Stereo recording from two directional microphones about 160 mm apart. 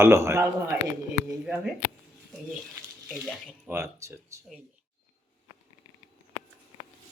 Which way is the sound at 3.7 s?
15° right (ahead or behind).